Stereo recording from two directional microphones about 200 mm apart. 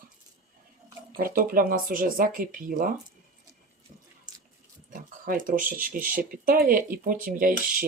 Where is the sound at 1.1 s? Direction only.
45° right (ahead or behind).